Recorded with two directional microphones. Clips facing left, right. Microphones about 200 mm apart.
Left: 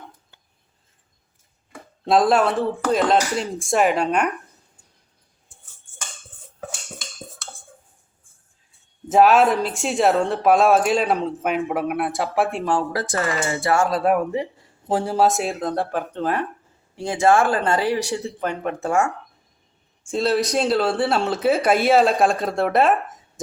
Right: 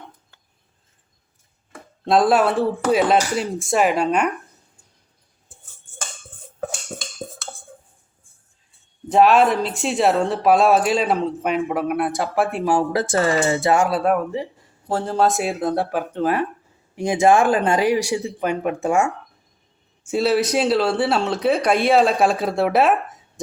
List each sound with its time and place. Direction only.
2.0 s speech: centre (ahead or behind)
9.0 s speech: centre (ahead or behind)
12.9 s speech: 25° right (ahead or behind)
14.0 s a man's voice: 5° left (ahead or behind)